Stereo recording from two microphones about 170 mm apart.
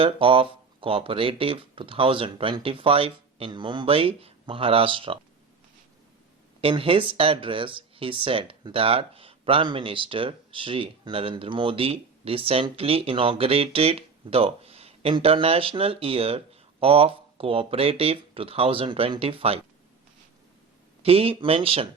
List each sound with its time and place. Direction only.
0.0 s speech: 30° right (ahead or behind)
6.6 s speech: 30° right (ahead or behind)
21.0 s speech: 35° right (ahead or behind)